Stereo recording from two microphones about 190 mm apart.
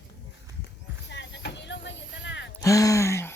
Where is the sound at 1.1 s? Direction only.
65° left (ahead or behind).